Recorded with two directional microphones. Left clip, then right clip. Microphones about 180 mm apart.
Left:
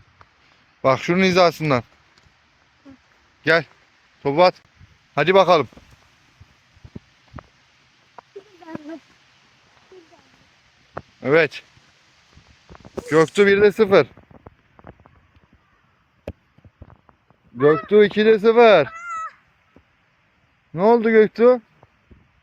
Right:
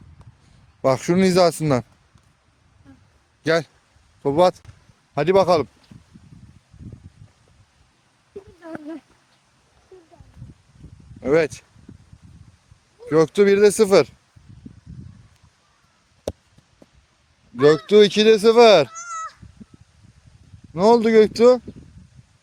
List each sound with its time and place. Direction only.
0.8 s speech: 35° right (ahead or behind)
3.4 s speech: 30° right (ahead or behind)
5.1 s a man's voice: 20° right (ahead or behind)
11.2 s speech: 20° right (ahead or behind)
13.1 s speech: 10° right (ahead or behind)
16.3 s a sound: 20° right (ahead or behind)
17.6 s speech: 20° right (ahead or behind)
20.7 s speech: 15° right (ahead or behind)